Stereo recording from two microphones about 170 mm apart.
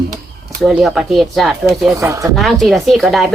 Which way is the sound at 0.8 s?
Centre (ahead or behind).